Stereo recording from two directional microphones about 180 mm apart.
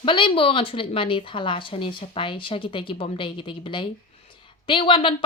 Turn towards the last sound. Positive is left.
turn(degrees=30)  # may be behind; listen again after turning